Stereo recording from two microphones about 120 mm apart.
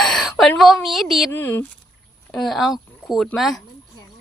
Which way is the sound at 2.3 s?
Centre (ahead or behind).